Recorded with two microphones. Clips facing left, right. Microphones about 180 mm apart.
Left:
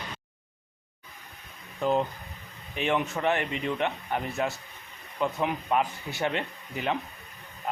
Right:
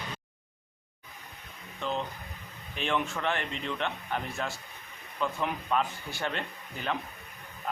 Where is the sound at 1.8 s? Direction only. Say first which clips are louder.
Left 7 dB; 40° left (ahead or behind).